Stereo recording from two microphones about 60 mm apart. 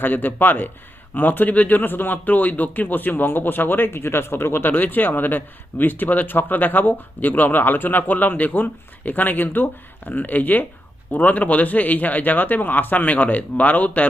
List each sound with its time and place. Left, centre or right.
0.0 s speech: left